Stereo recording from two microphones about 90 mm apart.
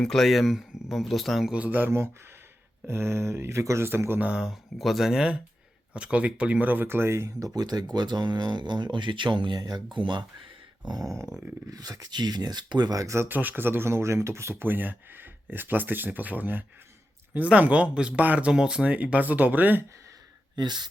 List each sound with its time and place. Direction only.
0.0 s speech: 5° left (ahead or behind)
1.5 s speech: 15° right (ahead or behind)
2.8 s speech: 30° right (ahead or behind)
4.3 s speech: 5° right (ahead or behind); by 9.6 s 60° right (ahead or behind)
9.6 s speech: 45° right (ahead or behind)
10.0 s speech: 65° right (ahead or behind)
11.0 s a sound: 35° right (ahead or behind)
11.7 s speech: 45° right (ahead or behind)
13.2 s speech: 20° right (ahead or behind)
20.6 s speech: 55° right (ahead or behind)